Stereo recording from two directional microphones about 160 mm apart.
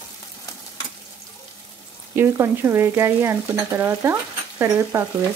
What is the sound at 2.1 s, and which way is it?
Stir, 15° right (ahead or behind).